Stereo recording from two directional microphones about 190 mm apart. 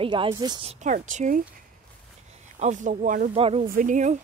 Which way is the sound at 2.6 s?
40° right (ahead or behind).